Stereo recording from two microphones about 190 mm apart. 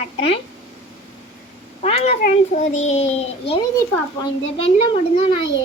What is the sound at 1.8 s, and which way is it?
A child's voice, 30° left (ahead or behind).